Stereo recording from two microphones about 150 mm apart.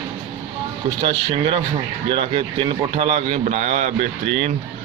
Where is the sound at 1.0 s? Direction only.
35° right (ahead or behind).